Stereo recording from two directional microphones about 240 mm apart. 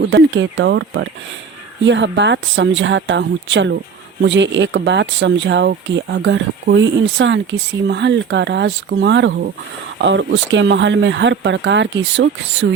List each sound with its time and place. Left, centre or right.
0.0 s speech: right